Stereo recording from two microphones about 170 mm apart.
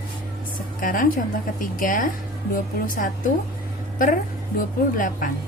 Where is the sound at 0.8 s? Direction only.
50° left (ahead or behind).